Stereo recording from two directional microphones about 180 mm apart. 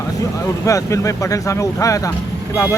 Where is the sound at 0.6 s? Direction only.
15° left (ahead or behind).